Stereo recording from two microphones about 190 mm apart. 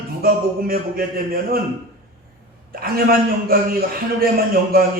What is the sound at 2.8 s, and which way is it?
Music, 50° right (ahead or behind).